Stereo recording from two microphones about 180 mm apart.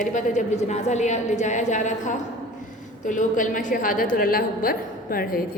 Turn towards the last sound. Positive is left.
turn(degrees=55)  # may be behind; listen again after turning